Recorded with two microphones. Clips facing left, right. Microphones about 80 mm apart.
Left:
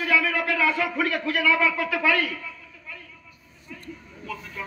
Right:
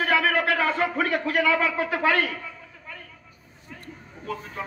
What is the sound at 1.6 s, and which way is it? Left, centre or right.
Speech, right.